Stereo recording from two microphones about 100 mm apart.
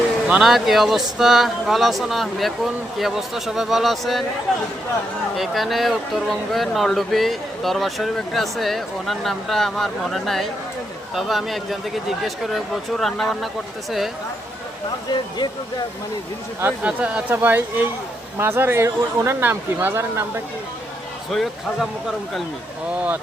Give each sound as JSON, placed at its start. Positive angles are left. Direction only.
{"t": 0.3, "sound": "speech", "side_deg": -5}
{"t": 16.8, "sound": "speech", "side_deg": -10}
{"t": 21.2, "sound": "speech", "side_deg": 0}